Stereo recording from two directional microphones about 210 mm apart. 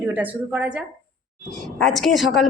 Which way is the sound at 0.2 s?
5° right (ahead or behind).